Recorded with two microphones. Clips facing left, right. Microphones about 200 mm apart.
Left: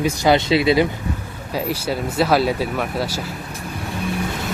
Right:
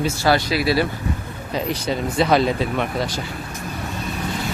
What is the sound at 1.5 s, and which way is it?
Speech, 5° left (ahead or behind).